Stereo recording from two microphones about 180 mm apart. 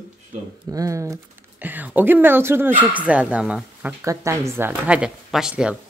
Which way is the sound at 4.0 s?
15° right (ahead or behind).